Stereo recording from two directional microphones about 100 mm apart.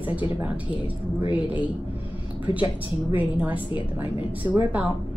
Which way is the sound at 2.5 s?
20° right (ahead or behind).